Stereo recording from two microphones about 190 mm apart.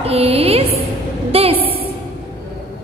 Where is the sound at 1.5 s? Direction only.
30° left (ahead or behind).